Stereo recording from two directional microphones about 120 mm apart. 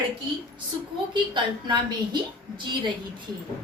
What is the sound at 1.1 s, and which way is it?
Speech, 40° right (ahead or behind).